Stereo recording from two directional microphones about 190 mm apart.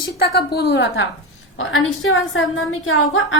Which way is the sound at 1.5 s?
90° left.